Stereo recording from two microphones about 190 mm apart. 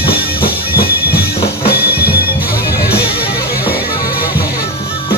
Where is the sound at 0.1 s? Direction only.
50° left (ahead or behind).